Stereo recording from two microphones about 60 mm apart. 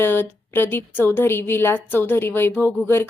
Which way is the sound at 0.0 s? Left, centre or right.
Left.